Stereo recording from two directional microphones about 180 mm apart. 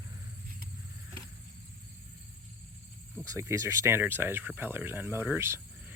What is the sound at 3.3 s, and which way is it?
Speech, 15° right (ahead or behind).